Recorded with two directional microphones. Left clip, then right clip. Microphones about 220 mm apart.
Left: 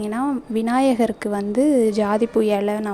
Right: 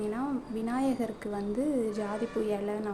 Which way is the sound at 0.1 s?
40° left (ahead or behind).